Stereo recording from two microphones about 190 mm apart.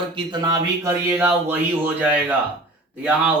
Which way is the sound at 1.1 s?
10° right (ahead or behind).